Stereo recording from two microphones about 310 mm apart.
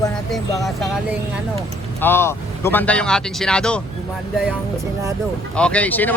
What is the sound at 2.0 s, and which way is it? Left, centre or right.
Speech, centre.